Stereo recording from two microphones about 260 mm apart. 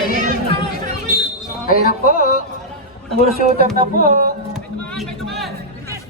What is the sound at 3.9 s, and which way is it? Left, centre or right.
Speech, right.